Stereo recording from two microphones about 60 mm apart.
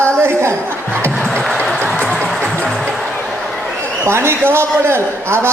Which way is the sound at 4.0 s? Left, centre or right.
Right.